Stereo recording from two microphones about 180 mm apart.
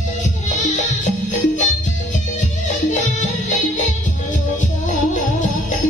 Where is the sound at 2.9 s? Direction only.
45° left (ahead or behind).